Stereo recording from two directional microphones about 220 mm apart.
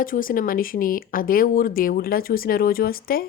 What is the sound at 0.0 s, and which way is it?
Speech, 40° left (ahead or behind).